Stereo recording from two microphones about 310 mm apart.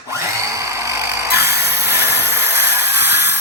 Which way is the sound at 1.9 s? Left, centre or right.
Centre.